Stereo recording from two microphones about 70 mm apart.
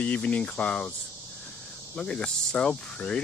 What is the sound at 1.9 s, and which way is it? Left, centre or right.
Speech, centre.